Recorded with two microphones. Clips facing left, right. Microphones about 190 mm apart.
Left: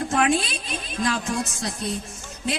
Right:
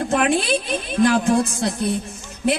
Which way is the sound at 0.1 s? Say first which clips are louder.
Right 4 dB; 60° right (ahead or behind).